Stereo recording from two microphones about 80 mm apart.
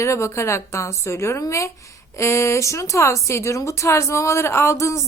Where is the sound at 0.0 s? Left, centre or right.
Left.